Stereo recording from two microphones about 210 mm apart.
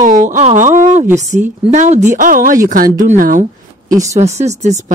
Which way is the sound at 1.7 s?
35° right (ahead or behind).